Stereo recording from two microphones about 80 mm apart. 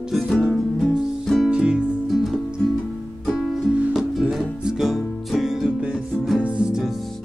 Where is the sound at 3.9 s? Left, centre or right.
Centre.